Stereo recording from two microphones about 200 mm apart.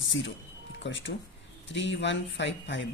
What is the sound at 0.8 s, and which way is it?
Speech, 65° left (ahead or behind).